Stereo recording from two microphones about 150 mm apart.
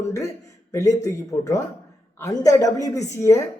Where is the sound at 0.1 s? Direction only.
20° left (ahead or behind).